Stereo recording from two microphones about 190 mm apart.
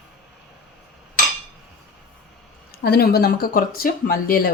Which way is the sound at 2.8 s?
55° left (ahead or behind).